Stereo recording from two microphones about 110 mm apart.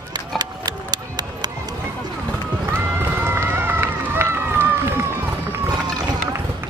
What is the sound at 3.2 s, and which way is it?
Run, 25° right (ahead or behind).